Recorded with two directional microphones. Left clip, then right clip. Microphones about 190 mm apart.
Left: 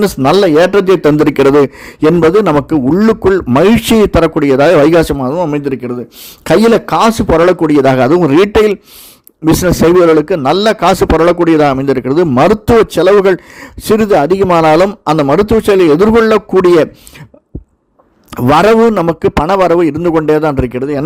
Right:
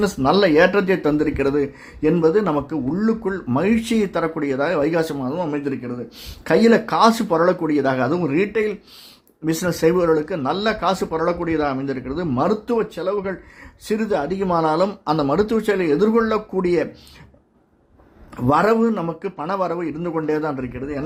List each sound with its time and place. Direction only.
0.0 s a man's voice: 40° left (ahead or behind)
18.3 s a man's voice: 50° left (ahead or behind)